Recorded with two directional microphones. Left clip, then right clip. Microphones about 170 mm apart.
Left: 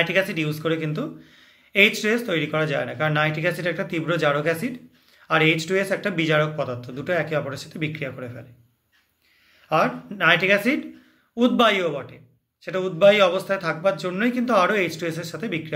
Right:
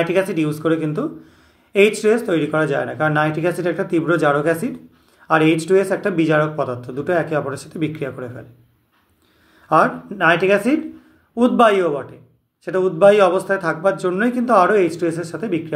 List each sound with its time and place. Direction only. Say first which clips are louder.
0.3 s a man's voice: right 6 dB; 20° left (ahead or behind)
2.2 s a man's voice: right 5 dB; 20° left (ahead or behind)
9.7 s a man's voice: right 6 dB; 15° left (ahead or behind)